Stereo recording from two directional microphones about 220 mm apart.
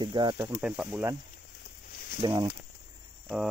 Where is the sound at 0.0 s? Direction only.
20° right (ahead or behind).